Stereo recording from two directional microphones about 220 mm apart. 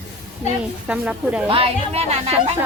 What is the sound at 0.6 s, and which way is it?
Speech, 5° right (ahead or behind).